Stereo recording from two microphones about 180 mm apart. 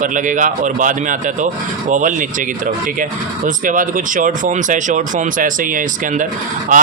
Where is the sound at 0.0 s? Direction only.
45° right (ahead or behind).